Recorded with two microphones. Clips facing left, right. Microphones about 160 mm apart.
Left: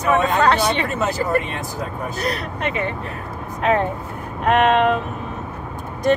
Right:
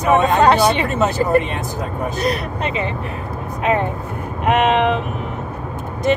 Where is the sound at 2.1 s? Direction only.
20° right (ahead or behind).